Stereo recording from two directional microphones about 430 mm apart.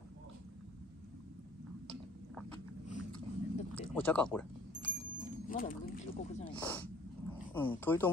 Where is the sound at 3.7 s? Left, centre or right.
Centre.